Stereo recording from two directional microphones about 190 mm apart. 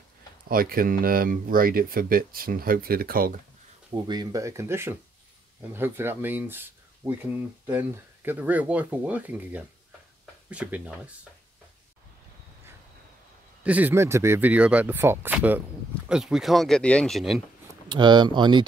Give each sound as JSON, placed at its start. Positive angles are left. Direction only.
{"t": 0.5, "sound": "speech", "side_deg": -50}
{"t": 3.9, "sound": "speech", "side_deg": -20}
{"t": 13.7, "sound": "speech", "side_deg": -10}
{"t": 17.8, "sound": "speech", "side_deg": -25}